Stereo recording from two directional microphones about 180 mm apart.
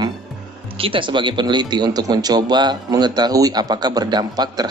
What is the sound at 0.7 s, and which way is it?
Speech, 30° right (ahead or behind).